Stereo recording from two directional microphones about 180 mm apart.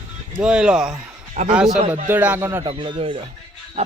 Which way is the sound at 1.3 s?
45° right (ahead or behind).